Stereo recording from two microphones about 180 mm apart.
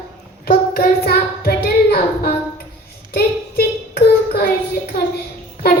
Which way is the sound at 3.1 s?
60° left (ahead or behind).